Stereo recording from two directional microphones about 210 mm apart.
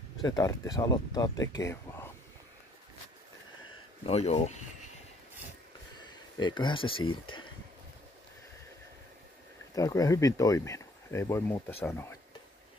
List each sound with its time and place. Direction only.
0.2 s speech: 15° left (ahead or behind)
4.0 s speech: 30° left (ahead or behind)
5.9 s a sound: 20° left (ahead or behind)
9.8 s speech: 15° left (ahead or behind)